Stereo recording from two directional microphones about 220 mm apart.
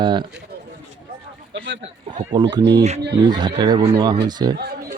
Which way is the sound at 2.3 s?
20° right (ahead or behind).